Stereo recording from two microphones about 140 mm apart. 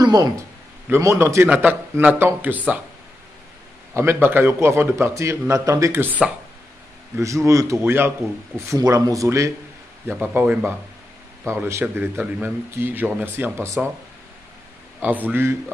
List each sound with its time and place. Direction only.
0.0 s a man's voice: 25° right (ahead or behind); by 2.8 s 10° right (ahead or behind)
3.9 s a man's voice: 15° right (ahead or behind)
15.0 s a man's voice: 10° right (ahead or behind)